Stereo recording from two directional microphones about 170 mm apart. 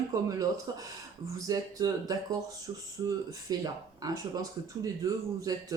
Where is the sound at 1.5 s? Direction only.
20° right (ahead or behind).